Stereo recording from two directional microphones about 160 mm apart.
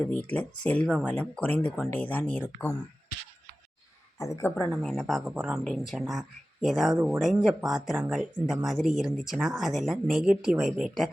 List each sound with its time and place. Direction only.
0.0 s speech: 10° left (ahead or behind)
4.2 s speech: 20° left (ahead or behind)
4.7 s speech: centre (ahead or behind)